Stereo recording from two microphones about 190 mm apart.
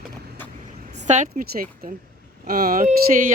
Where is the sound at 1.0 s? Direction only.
40° right (ahead or behind).